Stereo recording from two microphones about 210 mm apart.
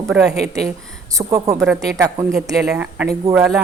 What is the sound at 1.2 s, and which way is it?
Speech, 15° right (ahead or behind).